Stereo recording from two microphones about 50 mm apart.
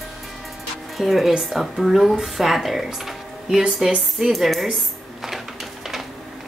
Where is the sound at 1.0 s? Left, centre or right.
Centre.